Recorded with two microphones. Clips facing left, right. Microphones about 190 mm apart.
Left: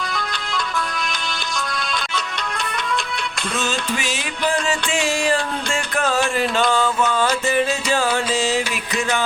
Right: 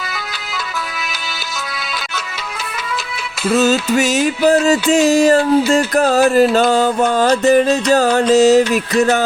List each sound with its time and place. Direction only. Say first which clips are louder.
3.6 s music: right 10 dB; 40° right (ahead or behind)